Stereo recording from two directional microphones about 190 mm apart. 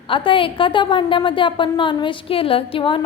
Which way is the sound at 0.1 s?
25° left (ahead or behind).